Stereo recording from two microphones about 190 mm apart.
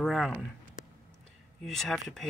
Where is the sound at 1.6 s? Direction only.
Centre (ahead or behind).